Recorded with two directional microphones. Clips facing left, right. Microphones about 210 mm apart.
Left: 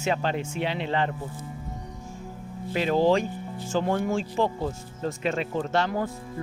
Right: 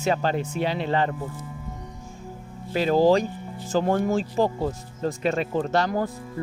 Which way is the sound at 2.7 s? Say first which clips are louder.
Right 3 dB; 40° right (ahead or behind).